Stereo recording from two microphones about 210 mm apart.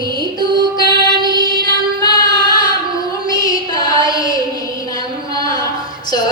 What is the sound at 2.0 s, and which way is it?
Child singing, 20° left (ahead or behind).